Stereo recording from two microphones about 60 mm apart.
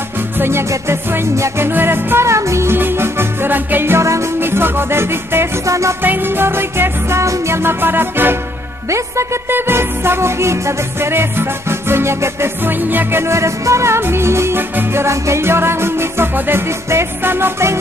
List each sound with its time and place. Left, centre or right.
0.4 s music: right
1.7 s music: right
2.2 s music: right
5.7 s music: right
6.0 s music: right
9.5 s music: right